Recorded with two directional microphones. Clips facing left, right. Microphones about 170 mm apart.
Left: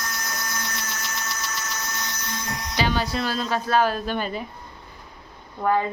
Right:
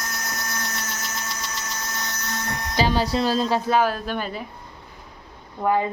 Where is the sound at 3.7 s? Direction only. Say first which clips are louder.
Even; 10° right (ahead or behind).